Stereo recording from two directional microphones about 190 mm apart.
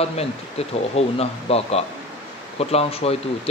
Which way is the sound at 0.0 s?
30° left (ahead or behind).